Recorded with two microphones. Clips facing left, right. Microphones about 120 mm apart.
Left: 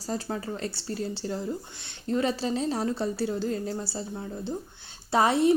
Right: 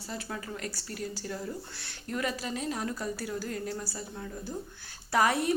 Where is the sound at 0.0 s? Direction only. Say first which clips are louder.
Left 7 dB; 35° left (ahead or behind).